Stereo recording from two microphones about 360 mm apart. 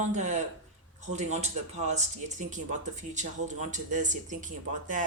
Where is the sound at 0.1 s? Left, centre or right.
Centre.